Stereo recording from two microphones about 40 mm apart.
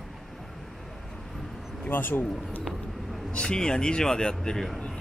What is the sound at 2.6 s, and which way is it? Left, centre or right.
Vehicle, centre.